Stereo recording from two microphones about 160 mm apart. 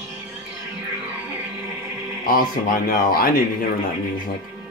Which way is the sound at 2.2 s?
65° left (ahead or behind).